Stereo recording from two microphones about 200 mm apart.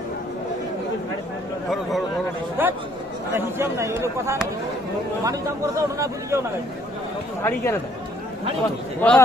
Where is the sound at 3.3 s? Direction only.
15° right (ahead or behind).